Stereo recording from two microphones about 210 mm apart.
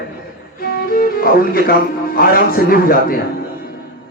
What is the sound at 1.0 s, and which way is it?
Music, 45° left (ahead or behind).